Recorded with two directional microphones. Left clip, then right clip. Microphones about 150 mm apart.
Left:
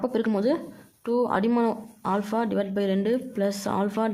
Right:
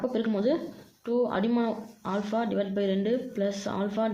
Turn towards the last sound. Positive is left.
turn(degrees=30)  # may be behind; listen again after turning